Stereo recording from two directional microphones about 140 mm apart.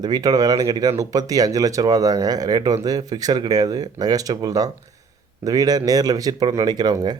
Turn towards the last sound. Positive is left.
turn(degrees=-30)  # may be behind; listen again after turning